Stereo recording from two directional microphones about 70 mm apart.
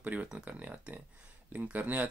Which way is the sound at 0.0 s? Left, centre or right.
Right.